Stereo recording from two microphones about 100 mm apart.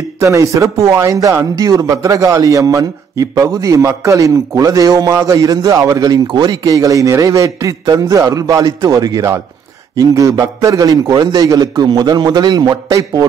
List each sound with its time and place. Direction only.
0.2 s a man's voice: 30° right (ahead or behind)
6.2 s a man's voice: 50° right (ahead or behind)